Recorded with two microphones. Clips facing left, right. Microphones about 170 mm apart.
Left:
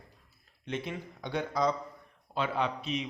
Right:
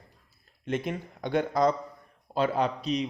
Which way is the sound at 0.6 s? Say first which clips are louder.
Right 5 dB; 50° right (ahead or behind).